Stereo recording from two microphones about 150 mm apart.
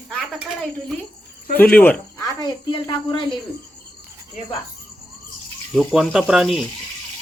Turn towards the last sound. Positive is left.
turn(degrees=0)  # may be behind; listen again after turning